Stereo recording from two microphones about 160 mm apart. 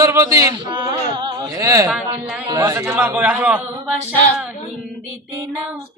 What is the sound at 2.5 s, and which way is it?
Speech, 20° right (ahead or behind).